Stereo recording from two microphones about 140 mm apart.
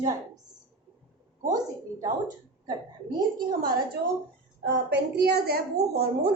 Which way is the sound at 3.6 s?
90° right.